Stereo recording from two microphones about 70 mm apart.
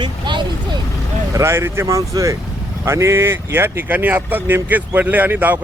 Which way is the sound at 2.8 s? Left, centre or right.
Right.